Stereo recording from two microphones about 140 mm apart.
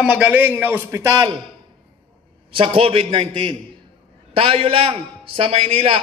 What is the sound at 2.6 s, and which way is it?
A man's voice, 40° right (ahead or behind).